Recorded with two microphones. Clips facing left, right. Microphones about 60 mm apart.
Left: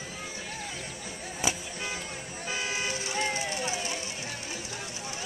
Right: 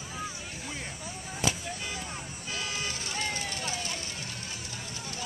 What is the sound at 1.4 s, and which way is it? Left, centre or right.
Music, centre.